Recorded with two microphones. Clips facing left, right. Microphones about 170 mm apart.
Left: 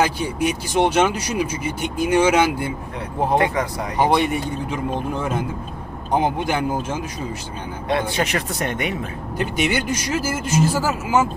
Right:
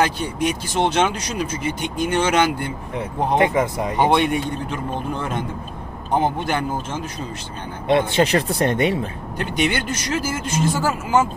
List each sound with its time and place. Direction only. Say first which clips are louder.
0.0 s speech: even; 10° left (ahead or behind)
3.3 s speech: right 4 dB; 25° right (ahead or behind)
4.0 s speech: even; centre (ahead or behind)
7.9 s speech: right 5 dB; 30° right (ahead or behind)
9.4 s speech: even; 10° left (ahead or behind)